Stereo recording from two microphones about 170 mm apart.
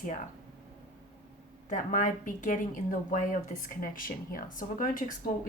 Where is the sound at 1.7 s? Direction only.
50° left (ahead or behind).